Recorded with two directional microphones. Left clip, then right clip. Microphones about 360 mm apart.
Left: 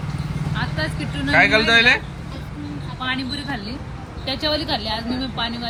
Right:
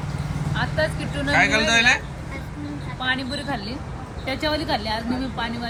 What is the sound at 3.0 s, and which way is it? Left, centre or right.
Speech, right.